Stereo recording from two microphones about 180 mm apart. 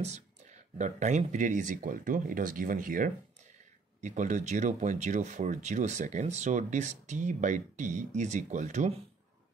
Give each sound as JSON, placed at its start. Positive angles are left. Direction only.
{"t": 0.0, "sound": "speech", "side_deg": -40}